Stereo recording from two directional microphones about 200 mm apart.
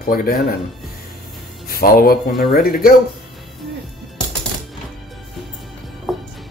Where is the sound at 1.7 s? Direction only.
45° left (ahead or behind).